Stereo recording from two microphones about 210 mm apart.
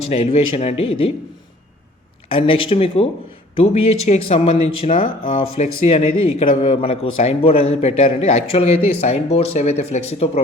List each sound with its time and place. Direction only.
0.1 s speech: 30° left (ahead or behind)
2.3 s speech: 25° left (ahead or behind)